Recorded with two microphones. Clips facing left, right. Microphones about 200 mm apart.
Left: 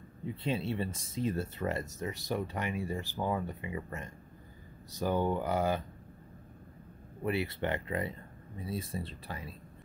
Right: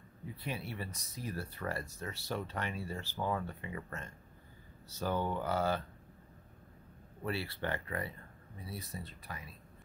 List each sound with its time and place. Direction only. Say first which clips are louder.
0.2 s speech: left 8 dB; 25° left (ahead or behind)
7.2 s speech: left 5 dB; 20° left (ahead or behind)